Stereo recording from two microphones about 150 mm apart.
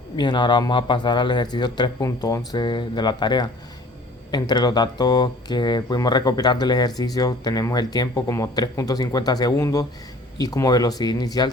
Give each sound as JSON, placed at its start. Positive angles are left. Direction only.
{"t": 0.2, "sound": "speech", "side_deg": 30}